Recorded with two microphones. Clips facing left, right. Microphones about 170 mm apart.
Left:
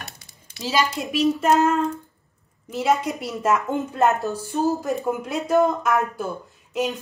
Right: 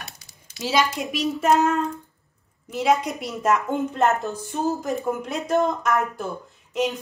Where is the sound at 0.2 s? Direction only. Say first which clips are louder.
Left 2 dB; 55° left (ahead or behind).